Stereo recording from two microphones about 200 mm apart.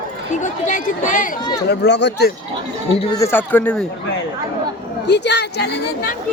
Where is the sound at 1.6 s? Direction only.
60° left (ahead or behind).